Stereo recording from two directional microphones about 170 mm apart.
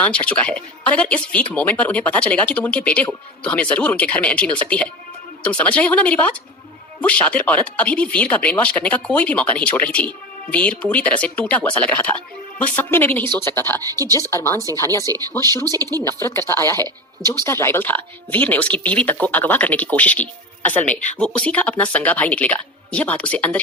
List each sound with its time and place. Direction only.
0.0 s speech: 5° left (ahead or behind)
15.6 s speech: 20° right (ahead or behind)
16.2 s speech: 15° left (ahead or behind)